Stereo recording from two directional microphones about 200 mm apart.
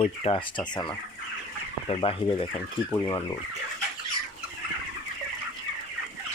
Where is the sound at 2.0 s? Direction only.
25° left (ahead or behind).